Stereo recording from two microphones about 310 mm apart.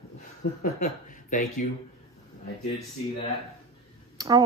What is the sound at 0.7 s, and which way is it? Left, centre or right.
Speech, left.